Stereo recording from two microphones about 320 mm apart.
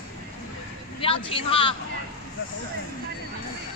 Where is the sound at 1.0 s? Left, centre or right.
Centre.